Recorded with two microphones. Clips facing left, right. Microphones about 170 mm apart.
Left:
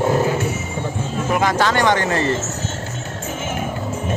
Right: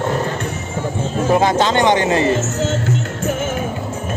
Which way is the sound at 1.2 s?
30° right (ahead or behind).